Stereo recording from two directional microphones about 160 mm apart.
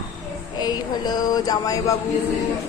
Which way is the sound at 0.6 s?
25° left (ahead or behind).